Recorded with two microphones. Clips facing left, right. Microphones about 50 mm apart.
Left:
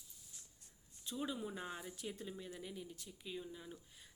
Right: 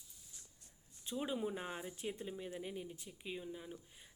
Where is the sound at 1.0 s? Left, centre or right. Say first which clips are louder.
Right 3 dB; right.